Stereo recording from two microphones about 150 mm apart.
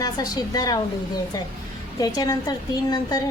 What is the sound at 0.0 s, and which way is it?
Speech, 25° left (ahead or behind).